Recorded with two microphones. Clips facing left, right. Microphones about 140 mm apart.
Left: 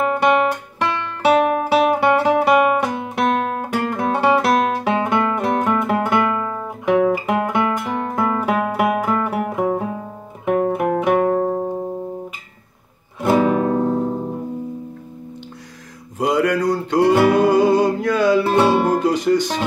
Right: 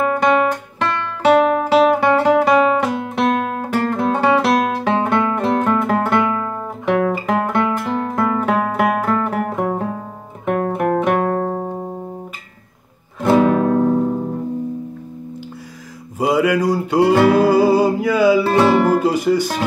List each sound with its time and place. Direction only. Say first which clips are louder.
0.0 s guitar: right 1 dB; 15° left (ahead or behind)
1.2 s music: right 2 dB; 10° left (ahead or behind)
13.3 s music: right 2 dB; 10° left (ahead or behind)
16.2 s mantra: right 2 dB; 5° right (ahead or behind)
17.4 s music: right 1 dB; 5° right (ahead or behind)